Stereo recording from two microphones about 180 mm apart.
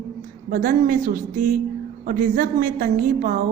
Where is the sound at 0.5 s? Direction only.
50° right (ahead or behind).